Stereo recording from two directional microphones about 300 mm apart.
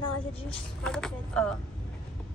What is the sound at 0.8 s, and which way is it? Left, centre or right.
Speech, centre.